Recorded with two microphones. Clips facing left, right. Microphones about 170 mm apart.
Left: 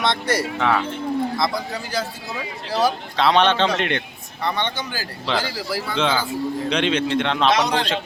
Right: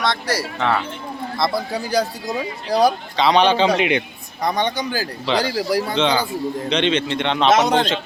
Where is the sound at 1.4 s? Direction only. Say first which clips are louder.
Right 3 dB; 10° right (ahead or behind).